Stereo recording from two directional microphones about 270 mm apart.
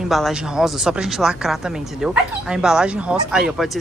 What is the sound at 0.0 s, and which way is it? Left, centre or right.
Speech, centre.